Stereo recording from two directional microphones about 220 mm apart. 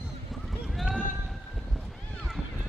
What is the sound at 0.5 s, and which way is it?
Clip-clop, centre (ahead or behind).